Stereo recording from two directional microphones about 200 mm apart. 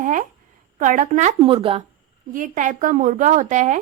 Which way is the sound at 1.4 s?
25° right (ahead or behind).